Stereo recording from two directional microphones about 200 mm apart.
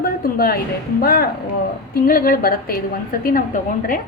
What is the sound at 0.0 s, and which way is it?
Music, 45° left (ahead or behind).